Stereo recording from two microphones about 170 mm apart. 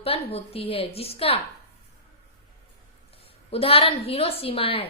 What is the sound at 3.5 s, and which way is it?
A woman's voice, 35° left (ahead or behind).